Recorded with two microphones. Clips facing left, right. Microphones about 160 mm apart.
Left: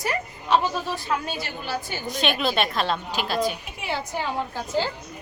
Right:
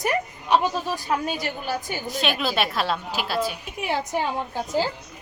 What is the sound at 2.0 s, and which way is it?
A woman's voice, centre (ahead or behind).